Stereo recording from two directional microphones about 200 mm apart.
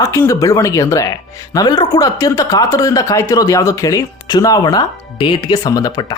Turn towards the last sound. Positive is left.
turn(degrees=20)  # may be behind; listen again after turning